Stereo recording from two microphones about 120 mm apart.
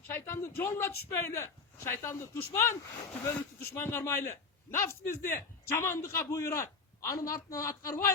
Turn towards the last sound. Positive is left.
turn(degrees=30)  # may be behind; listen again after turning